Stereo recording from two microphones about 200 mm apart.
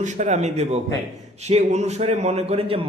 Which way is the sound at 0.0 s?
35° right (ahead or behind).